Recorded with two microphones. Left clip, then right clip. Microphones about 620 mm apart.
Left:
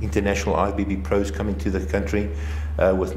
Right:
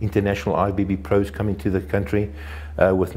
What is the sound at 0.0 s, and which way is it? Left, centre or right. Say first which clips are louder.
A man's voice: right 1 dB; right.